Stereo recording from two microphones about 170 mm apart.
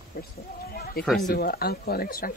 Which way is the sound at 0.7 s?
65° left (ahead or behind).